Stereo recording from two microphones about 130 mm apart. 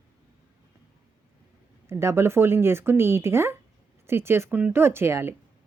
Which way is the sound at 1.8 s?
20° right (ahead or behind).